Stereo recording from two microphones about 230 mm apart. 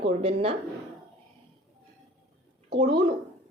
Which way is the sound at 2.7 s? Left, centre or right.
Right.